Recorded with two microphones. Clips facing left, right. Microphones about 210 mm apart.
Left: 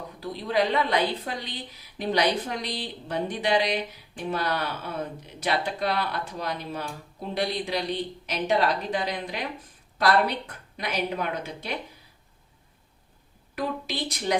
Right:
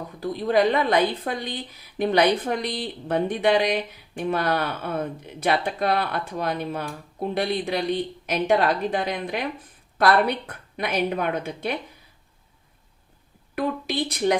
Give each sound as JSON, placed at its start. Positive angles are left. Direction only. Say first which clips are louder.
{"t": 0.2, "sound": "a woman's voice", "louder": "right 5 dB", "side_deg": -50}
{"t": 13.6, "sound": "speech", "louder": "right 5 dB", "side_deg": -55}